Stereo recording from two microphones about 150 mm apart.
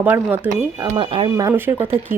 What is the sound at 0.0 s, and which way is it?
Speech, 10° right (ahead or behind).